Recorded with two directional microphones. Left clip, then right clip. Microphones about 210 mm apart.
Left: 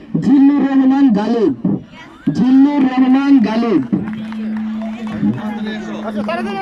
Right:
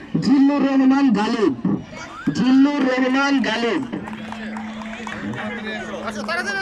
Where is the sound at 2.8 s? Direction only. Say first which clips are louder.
Left 4 dB; 50° left (ahead or behind).